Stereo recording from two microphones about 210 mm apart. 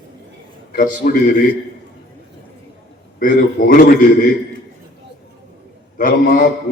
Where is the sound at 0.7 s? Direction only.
40° left (ahead or behind).